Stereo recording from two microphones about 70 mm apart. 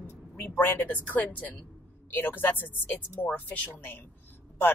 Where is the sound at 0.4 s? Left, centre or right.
Left.